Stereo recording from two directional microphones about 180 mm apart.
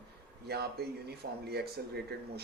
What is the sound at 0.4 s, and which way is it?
Speech, 65° right (ahead or behind).